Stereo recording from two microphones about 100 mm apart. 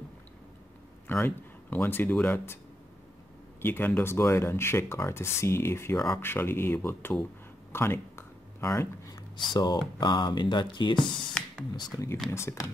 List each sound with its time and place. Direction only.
1.0 s speech: 20° left (ahead or behind)
3.6 s speech: 20° left (ahead or behind)
7.7 s a sound: 25° left (ahead or behind)
9.5 s speech: 45° left (ahead or behind)
11.4 s a sound: 10° left (ahead or behind)
11.7 s speech: 45° left (ahead or behind)
12.3 s speech: 25° left (ahead or behind)